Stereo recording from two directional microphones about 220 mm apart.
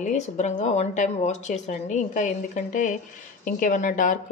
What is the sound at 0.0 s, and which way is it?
Speech, 30° left (ahead or behind).